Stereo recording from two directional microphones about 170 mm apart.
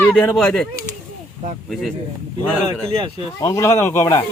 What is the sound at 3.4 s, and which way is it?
Speech, 20° left (ahead or behind).